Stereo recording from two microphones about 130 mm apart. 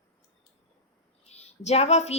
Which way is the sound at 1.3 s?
55° left (ahead or behind).